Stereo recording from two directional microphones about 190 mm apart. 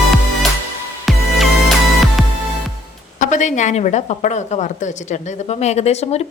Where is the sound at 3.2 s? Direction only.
40° left (ahead or behind).